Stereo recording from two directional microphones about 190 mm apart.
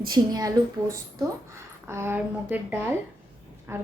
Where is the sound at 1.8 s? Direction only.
15° right (ahead or behind).